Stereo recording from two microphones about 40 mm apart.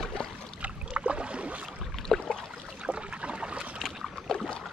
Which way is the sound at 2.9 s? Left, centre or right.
Right.